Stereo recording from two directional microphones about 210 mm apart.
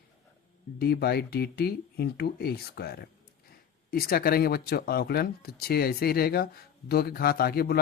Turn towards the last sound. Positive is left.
turn(degrees=45)  # may be behind; listen again after turning